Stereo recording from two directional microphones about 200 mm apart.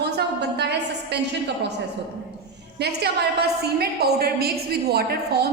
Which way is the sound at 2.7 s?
55° right (ahead or behind).